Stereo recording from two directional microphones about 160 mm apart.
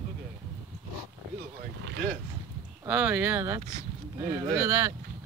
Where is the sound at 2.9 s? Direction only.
10° right (ahead or behind).